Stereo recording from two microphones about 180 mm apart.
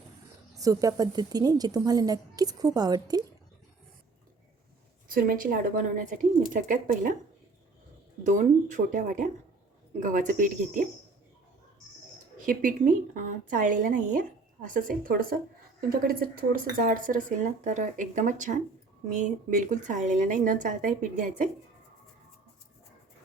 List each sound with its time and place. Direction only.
0.5 s a woman's voice: 20° right (ahead or behind)
5.0 s a woman's voice: 50° right (ahead or behind)
8.2 s a woman's voice: 45° right (ahead or behind)
12.5 s a woman's voice: 50° right (ahead or behind)